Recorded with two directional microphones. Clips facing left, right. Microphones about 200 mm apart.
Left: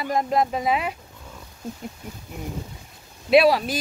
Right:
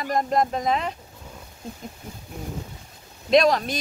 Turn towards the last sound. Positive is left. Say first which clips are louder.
# left 2 dB
turn(degrees=5)  # may be behind; listen again after turning